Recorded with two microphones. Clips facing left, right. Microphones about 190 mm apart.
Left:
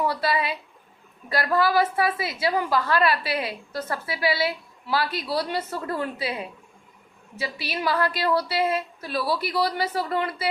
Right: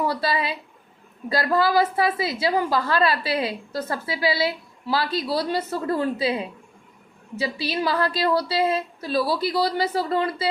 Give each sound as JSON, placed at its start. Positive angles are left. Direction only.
{"t": 0.0, "sound": "a woman's voice", "side_deg": -30}